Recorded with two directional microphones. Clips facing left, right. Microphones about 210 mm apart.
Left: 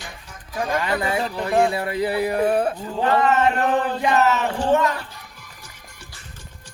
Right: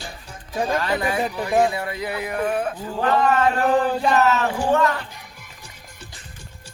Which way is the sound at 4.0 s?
20° left (ahead or behind).